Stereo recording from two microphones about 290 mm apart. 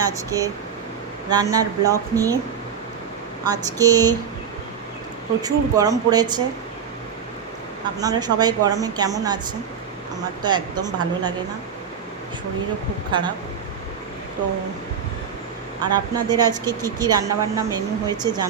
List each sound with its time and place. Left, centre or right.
0.0 s a woman's voice: centre
3.4 s a woman's voice: centre
5.4 s a woman's voice: centre
8.0 s a woman's voice: centre
10.4 s a woman's voice: centre
13.1 s a woman's voice: centre
15.8 s a woman's voice: centre